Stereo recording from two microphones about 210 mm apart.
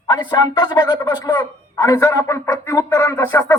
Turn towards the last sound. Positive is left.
turn(degrees=10)  # may be behind; listen again after turning